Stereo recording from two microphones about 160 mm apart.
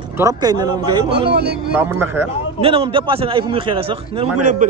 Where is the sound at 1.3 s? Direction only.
90° right.